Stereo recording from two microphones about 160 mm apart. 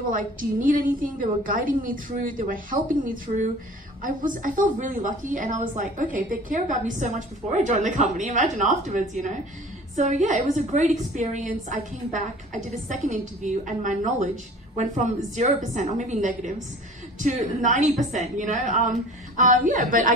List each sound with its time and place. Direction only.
0.1 s a woman's voice: 55° right (ahead or behind)